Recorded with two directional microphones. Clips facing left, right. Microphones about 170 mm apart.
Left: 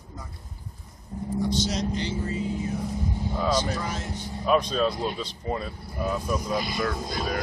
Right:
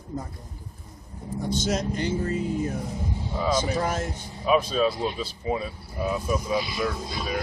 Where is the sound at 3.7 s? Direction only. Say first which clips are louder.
Right 5 dB; 50° right (ahead or behind).